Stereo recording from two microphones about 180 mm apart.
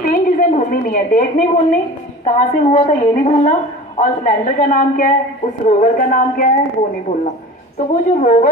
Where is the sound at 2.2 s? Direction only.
40° left (ahead or behind).